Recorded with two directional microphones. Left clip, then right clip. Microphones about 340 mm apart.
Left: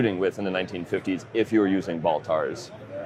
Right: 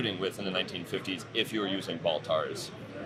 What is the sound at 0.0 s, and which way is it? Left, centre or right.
Speech, left.